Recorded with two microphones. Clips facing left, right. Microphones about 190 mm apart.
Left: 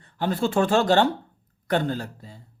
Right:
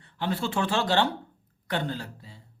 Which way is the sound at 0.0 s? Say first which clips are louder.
Left 5 dB; 45° left (ahead or behind).